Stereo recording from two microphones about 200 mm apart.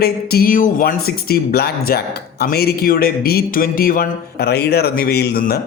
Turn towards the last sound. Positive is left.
turn(degrees=50)  # may be behind; listen again after turning